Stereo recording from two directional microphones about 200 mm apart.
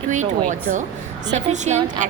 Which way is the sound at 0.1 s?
35° right (ahead or behind).